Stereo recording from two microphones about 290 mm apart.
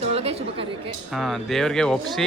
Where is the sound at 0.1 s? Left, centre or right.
Right.